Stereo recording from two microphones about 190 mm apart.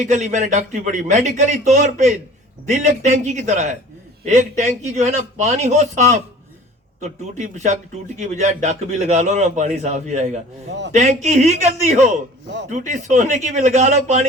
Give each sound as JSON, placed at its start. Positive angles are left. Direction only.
{"t": 0.0, "sound": "a man's voice", "side_deg": -40}